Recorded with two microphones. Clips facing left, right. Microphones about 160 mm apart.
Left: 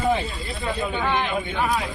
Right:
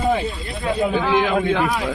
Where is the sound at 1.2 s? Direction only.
85° right.